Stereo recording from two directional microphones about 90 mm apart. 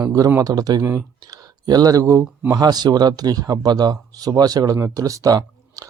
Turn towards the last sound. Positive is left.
turn(degrees=-45)  # may be behind; listen again after turning